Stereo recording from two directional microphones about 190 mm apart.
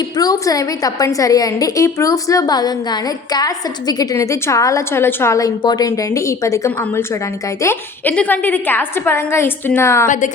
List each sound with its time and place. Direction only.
0.2 s a woman's voice: 20° left (ahead or behind)